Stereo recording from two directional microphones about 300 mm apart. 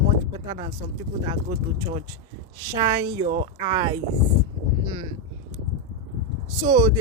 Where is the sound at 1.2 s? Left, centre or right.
Centre.